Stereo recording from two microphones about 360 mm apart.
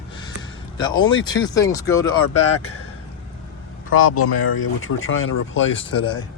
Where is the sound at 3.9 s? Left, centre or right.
Left.